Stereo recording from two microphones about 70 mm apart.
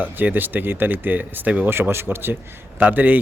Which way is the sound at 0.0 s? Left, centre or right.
Right.